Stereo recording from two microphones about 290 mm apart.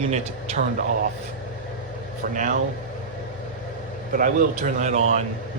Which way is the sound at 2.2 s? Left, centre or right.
Right.